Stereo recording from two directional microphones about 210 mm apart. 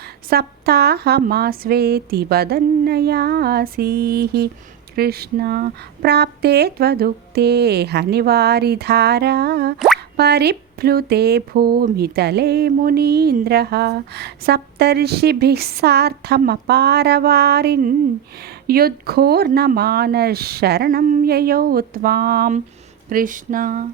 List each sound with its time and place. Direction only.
0.0 s speech: 50° right (ahead or behind)
9.7 s plop: centre (ahead or behind)
10.2 s speech: 50° right (ahead or behind)
23.0 s a sound: 40° right (ahead or behind)